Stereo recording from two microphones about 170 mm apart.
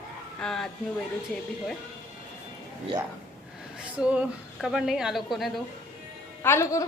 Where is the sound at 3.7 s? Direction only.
5° right (ahead or behind).